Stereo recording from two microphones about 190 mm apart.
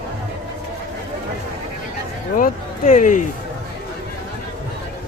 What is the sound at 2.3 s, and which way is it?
Speech, 45° left (ahead or behind).